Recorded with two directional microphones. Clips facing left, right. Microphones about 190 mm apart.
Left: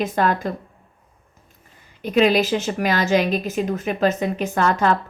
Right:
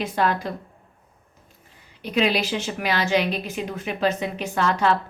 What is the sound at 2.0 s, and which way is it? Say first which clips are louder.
A woman's voice: left 5 dB; 45° left (ahead or behind).